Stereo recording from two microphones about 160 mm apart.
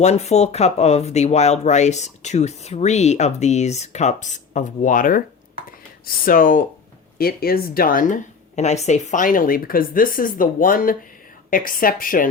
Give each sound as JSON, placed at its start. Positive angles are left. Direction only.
{"t": 0.0, "sound": "speech", "side_deg": 45}
{"t": 7.2, "sound": "speech", "side_deg": 70}